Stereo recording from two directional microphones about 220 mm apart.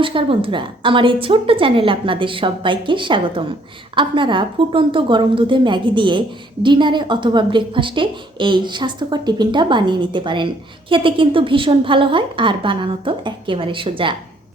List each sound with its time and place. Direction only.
0.0 s a woman's voice: 25° right (ahead or behind)